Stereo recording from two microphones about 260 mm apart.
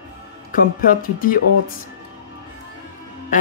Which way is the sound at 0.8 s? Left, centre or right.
Left.